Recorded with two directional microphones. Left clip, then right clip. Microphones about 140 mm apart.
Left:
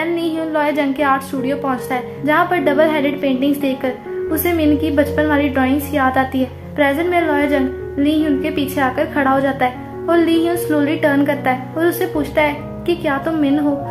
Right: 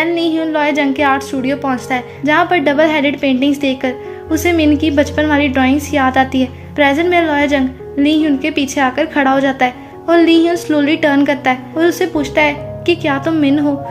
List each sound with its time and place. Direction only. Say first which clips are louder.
0.0 s a woman's voice: right 4 dB; 50° right (ahead or behind)